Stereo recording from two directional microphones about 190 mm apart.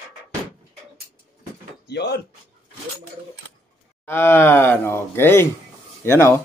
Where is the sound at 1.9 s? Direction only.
60° left (ahead or behind).